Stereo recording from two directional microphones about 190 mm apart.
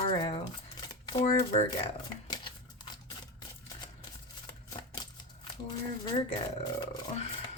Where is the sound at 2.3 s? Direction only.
20° left (ahead or behind).